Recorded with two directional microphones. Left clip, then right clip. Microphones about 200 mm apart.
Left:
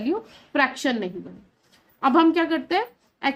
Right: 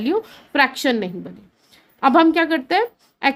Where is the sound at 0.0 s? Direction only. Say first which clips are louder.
Right 6 dB; 40° right (ahead or behind).